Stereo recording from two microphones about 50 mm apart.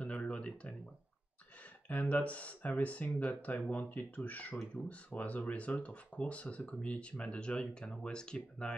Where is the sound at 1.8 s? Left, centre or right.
Left.